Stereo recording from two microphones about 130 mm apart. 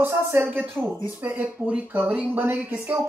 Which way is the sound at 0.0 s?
20° right (ahead or behind).